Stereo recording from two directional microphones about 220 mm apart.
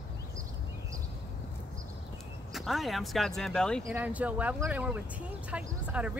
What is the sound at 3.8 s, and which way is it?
Speech, 10° right (ahead or behind).